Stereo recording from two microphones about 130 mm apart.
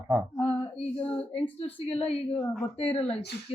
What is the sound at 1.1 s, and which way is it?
Speech, 10° left (ahead or behind).